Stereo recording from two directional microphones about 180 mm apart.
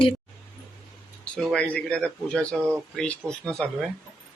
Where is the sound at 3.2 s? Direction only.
15° right (ahead or behind).